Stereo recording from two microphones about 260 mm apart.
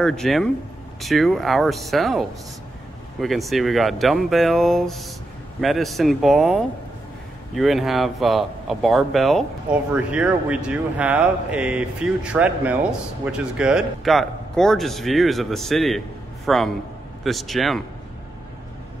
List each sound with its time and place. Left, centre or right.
0.0 s speech: centre